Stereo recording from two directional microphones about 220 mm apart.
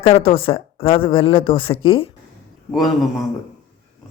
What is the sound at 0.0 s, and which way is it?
Speech, 25° left (ahead or behind).